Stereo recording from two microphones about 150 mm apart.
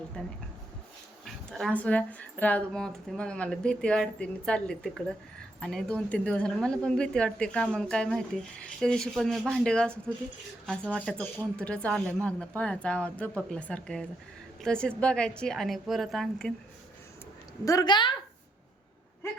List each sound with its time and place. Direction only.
0.1 s a woman's voice: 5° left (ahead or behind)
17.7 s a woman's voice: 25° left (ahead or behind)